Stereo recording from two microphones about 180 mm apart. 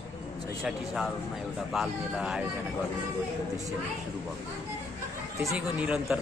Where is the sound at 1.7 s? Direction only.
5° right (ahead or behind).